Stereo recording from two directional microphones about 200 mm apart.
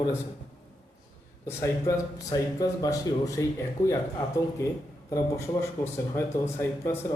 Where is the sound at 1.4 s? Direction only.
15° left (ahead or behind).